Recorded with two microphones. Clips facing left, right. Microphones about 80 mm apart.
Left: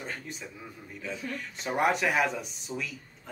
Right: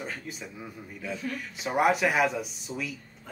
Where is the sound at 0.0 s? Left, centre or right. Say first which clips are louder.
Right 1 dB; centre.